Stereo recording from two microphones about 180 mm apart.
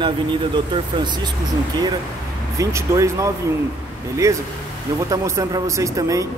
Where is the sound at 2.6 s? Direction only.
15° right (ahead or behind).